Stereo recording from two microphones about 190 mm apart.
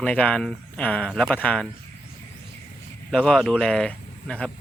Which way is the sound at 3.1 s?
5° left (ahead or behind).